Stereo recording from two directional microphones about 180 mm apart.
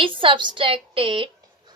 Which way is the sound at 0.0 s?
30° right (ahead or behind).